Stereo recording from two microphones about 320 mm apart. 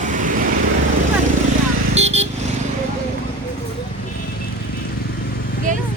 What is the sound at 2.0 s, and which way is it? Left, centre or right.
Vehicle, centre.